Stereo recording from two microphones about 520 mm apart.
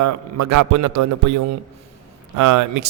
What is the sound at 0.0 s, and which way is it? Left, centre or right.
A man's voice, right.